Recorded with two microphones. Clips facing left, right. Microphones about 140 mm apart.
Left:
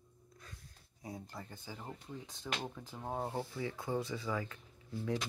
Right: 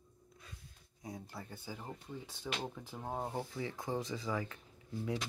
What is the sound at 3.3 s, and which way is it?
Speech, 15° right (ahead or behind).